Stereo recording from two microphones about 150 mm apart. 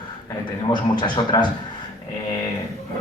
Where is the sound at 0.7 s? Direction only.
30° left (ahead or behind).